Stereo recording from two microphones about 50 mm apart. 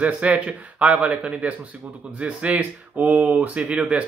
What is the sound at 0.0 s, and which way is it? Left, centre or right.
Speech, right.